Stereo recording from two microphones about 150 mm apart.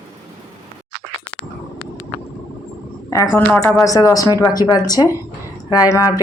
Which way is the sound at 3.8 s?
25° left (ahead or behind).